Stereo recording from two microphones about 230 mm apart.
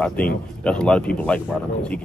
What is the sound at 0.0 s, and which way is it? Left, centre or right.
Speech, centre.